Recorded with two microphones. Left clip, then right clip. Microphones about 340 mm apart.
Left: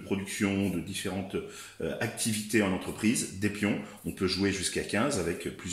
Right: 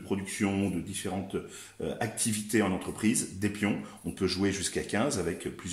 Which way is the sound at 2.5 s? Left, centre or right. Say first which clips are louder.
Even; centre.